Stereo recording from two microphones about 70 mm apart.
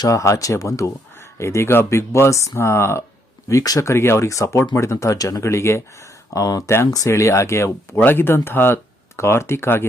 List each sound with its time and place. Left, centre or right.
0.1 s speech: left
3.6 s speech: left
3.8 s speech: left
5.4 s speech: left
6.4 s speech: left
7.1 s speech: left